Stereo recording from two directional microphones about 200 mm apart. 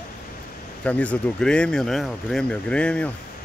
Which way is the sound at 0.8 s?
5° left (ahead or behind).